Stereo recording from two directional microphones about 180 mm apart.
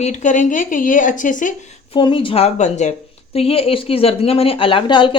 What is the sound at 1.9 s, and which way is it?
A woman's voice, 30° left (ahead or behind).